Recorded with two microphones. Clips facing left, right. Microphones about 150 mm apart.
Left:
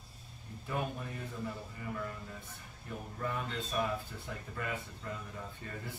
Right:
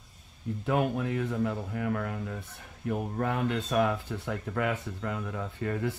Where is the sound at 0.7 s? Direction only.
85° right.